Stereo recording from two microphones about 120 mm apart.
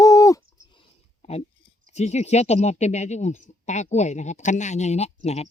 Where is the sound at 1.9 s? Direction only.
70° left (ahead or behind).